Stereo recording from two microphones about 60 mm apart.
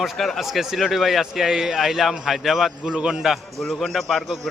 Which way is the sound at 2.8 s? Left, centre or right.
Centre.